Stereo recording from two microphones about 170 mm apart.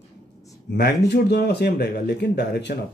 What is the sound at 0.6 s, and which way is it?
Speech, 70° left (ahead or behind).